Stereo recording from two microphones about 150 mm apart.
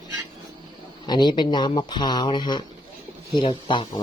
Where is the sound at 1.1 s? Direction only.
30° left (ahead or behind).